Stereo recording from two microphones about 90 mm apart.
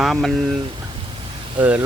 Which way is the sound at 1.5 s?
20° right (ahead or behind).